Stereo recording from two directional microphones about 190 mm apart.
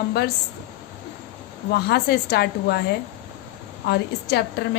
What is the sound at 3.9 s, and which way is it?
Speech, 60° left (ahead or behind).